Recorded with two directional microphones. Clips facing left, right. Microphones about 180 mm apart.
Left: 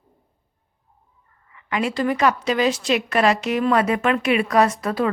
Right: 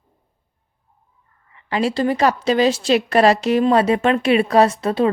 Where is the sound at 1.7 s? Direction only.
30° right (ahead or behind).